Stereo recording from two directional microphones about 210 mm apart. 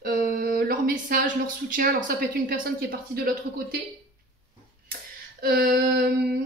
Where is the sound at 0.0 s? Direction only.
45° right (ahead or behind).